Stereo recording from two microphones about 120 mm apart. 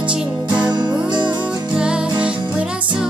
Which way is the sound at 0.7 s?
40° right (ahead or behind).